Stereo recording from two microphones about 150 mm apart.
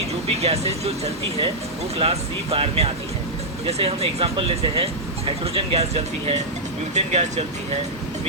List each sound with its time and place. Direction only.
0.3 s speech: 45° right (ahead or behind)